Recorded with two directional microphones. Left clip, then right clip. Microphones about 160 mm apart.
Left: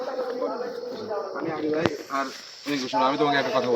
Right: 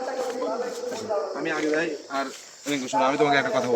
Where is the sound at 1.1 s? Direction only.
55° right (ahead or behind).